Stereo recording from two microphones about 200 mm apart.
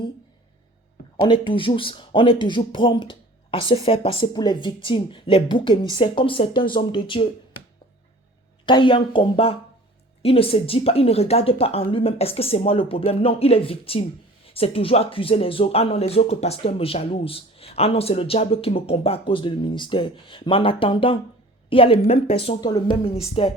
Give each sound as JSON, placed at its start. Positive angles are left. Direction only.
{"t": 1.1, "sound": "speech", "side_deg": 25}
{"t": 8.6, "sound": "speech", "side_deg": 25}